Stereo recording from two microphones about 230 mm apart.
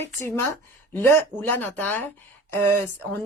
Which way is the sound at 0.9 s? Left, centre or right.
Centre.